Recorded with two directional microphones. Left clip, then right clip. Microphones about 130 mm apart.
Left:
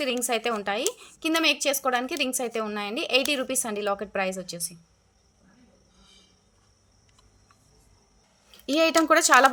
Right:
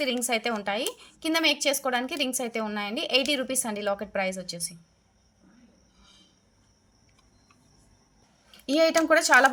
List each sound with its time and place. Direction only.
0.0 s a woman's voice: 20° left (ahead or behind)
8.4 s speech: 15° left (ahead or behind); by 9.5 s 35° left (ahead or behind)